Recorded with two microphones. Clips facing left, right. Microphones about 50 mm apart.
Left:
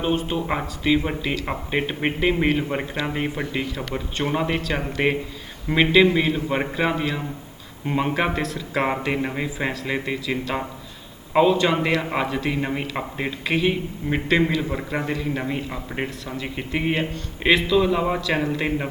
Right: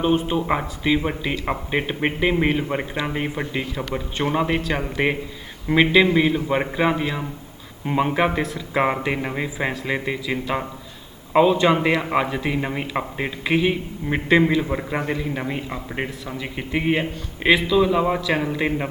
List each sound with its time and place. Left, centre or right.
0.3 s speech: centre
11.5 s a man's voice: centre
15.4 s a man's voice: centre